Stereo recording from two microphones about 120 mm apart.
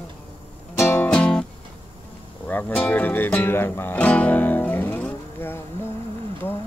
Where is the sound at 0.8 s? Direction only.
20° left (ahead or behind).